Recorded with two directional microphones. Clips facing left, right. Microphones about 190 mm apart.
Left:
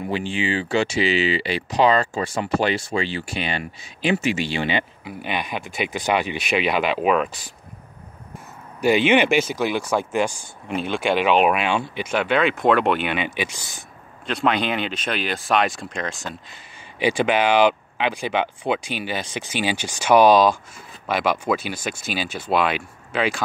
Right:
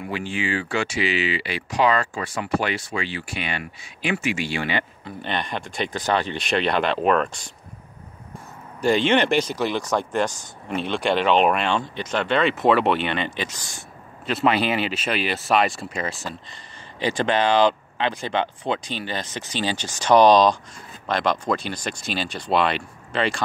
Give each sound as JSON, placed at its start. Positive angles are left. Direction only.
{"t": 0.0, "sound": "speech", "side_deg": 25}
{"t": 5.0, "sound": "speech", "side_deg": 5}
{"t": 8.8, "sound": "speech", "side_deg": 10}